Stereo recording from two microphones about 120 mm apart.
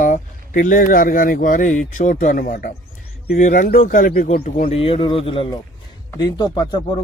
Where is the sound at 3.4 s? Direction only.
90° left.